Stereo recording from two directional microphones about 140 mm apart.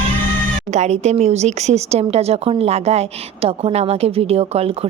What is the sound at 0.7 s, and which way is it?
A woman's voice, 55° right (ahead or behind).